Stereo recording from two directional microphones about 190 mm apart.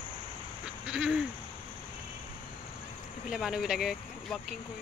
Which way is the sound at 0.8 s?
5° right (ahead or behind).